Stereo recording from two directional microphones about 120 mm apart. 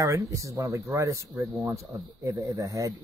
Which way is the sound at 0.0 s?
25° right (ahead or behind).